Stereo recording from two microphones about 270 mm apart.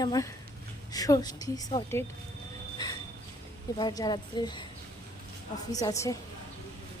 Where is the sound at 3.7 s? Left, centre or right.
Centre.